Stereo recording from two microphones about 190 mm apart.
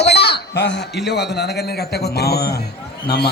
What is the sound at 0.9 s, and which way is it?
A man's voice, 60° left (ahead or behind).